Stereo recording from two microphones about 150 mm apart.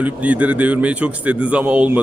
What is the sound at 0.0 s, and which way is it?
Speech, 10° right (ahead or behind).